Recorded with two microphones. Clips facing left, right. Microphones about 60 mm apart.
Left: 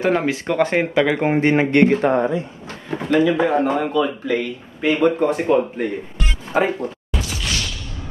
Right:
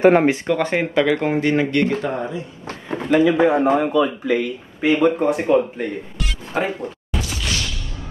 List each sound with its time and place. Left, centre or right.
0.0 s speech: right
0.5 s speech: centre
1.2 s speech: left
3.2 s speech: centre
6.5 s a sound: centre